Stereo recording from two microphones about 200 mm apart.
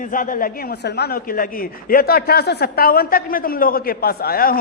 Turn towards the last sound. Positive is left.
turn(degrees=50)  # may be behind; listen again after turning